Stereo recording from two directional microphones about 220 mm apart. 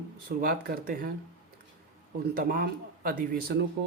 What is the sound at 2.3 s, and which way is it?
A man's voice, 45° right (ahead or behind).